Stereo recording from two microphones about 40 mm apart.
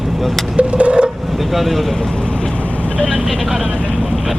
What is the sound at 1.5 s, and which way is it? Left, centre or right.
Speech, centre.